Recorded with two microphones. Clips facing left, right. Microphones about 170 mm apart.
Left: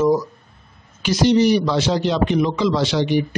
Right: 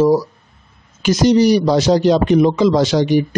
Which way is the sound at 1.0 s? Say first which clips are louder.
Right 3 dB; 45° right (ahead or behind).